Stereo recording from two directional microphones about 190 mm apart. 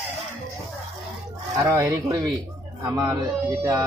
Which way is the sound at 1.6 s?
15° right (ahead or behind).